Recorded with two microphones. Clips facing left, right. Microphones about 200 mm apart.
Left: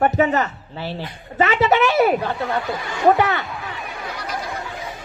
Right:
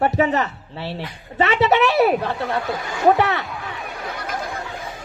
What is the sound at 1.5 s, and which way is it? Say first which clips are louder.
Speech: right 1 dB; centre (ahead or behind).